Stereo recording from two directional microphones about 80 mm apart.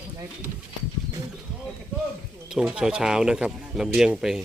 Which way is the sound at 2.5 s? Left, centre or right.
Centre.